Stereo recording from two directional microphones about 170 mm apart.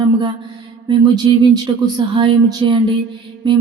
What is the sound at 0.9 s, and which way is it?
Music, 25° right (ahead or behind).